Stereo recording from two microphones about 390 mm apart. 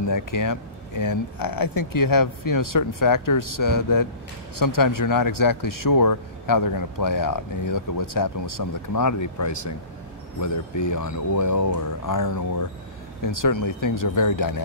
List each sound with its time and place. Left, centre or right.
0.1 s speech: left